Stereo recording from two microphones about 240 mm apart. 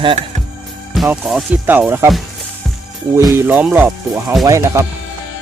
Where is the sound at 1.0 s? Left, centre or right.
Centre.